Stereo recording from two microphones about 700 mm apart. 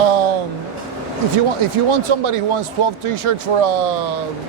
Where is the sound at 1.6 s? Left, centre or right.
Right.